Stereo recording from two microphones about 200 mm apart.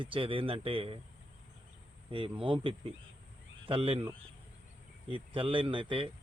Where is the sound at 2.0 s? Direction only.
25° right (ahead or behind).